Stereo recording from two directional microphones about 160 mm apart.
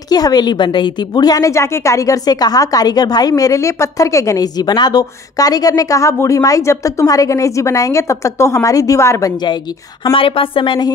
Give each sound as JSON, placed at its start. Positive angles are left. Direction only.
{"t": 0.1, "sound": "a woman's voice", "side_deg": 25}